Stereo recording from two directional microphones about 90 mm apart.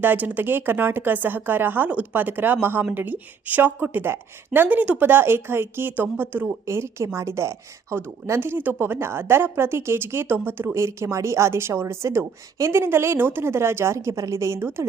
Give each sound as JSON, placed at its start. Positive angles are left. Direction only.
{"t": 0.0, "sound": "a woman's voice", "side_deg": -20}